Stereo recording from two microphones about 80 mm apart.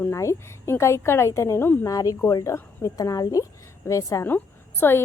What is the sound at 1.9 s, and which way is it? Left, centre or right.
A woman's voice, left.